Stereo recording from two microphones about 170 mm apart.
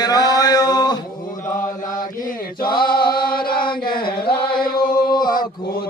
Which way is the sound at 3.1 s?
60° left (ahead or behind).